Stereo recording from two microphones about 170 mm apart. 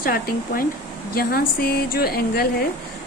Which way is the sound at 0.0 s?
60° left (ahead or behind).